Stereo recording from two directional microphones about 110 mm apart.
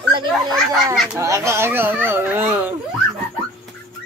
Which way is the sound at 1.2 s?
25° right (ahead or behind).